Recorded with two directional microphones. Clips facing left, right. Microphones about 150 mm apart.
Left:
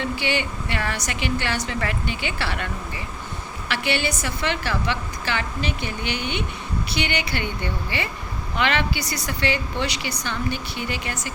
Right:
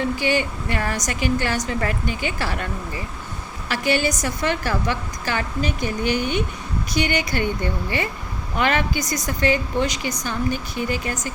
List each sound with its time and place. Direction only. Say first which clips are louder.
0.0 s a woman's voice: right 4 dB; 40° right (ahead or behind)
3.7 s a woman's voice: right 4 dB; 40° right (ahead or behind)